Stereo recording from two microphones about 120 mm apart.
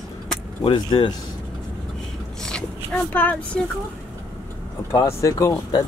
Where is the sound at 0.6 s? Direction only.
45° left (ahead or behind).